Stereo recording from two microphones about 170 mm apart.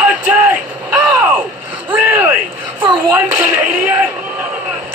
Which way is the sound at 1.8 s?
10° right (ahead or behind).